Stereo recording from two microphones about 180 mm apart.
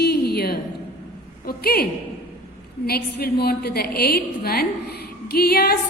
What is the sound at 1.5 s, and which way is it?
A woman's voice, 60° left (ahead or behind).